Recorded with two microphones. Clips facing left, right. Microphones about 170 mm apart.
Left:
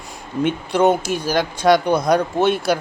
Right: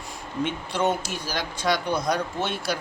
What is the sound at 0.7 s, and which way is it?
Speech, 70° left (ahead or behind).